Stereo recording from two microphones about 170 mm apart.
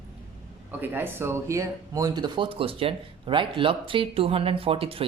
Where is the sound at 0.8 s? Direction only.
10° right (ahead or behind).